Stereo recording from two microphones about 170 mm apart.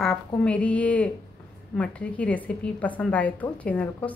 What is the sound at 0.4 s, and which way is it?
Speech, 10° left (ahead or behind).